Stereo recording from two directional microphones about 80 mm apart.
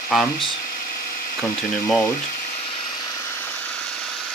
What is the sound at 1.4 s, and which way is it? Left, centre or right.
Speech, centre.